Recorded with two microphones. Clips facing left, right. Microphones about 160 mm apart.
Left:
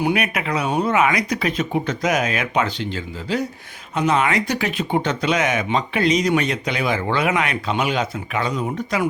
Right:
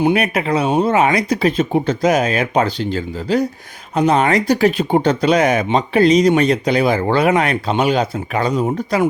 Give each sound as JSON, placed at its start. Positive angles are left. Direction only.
{"t": 0.0, "sound": "speech", "side_deg": -30}